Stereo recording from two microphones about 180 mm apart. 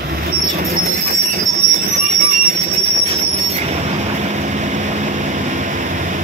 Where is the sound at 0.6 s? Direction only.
60° right (ahead or behind).